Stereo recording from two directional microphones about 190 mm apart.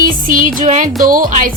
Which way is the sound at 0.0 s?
45° right (ahead or behind).